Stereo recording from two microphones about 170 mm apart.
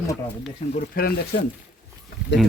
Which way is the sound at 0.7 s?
55° left (ahead or behind).